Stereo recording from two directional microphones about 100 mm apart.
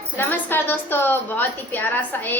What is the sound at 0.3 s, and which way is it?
A woman's voice, 20° left (ahead or behind).